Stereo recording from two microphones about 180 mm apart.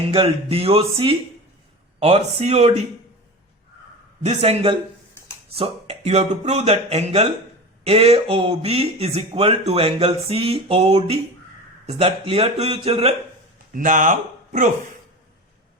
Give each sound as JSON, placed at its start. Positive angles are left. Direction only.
{"t": 0.1, "sound": "speech", "side_deg": -30}
{"t": 4.2, "sound": "speech", "side_deg": -35}
{"t": 13.7, "sound": "speech", "side_deg": -45}